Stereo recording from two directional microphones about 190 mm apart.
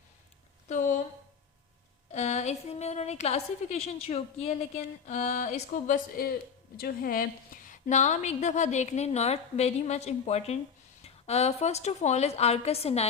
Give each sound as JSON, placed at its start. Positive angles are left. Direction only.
{"t": 2.1, "sound": "a woman's voice", "side_deg": 35}